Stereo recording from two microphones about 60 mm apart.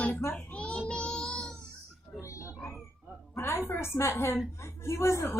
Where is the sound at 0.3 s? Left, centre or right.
Centre.